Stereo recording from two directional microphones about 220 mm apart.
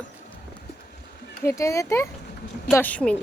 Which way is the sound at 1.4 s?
15° left (ahead or behind).